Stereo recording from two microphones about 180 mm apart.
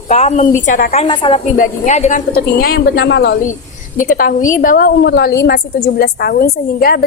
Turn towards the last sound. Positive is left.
turn(degrees=55)  # may be behind; listen again after turning